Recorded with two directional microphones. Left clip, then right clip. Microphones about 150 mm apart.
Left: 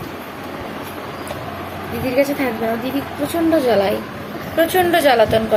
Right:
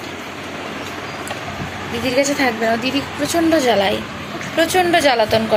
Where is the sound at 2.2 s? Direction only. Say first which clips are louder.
Left 1 dB; 5° right (ahead or behind).